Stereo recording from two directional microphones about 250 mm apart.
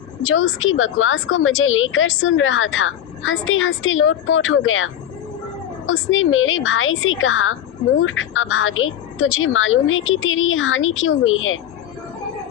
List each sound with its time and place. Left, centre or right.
0.2 s a woman's voice: left